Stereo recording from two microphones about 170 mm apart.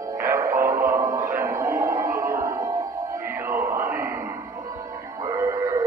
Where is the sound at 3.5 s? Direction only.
15° right (ahead or behind).